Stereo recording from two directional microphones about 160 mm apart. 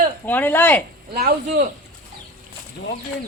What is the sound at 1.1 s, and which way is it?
Speech, 65° right (ahead or behind).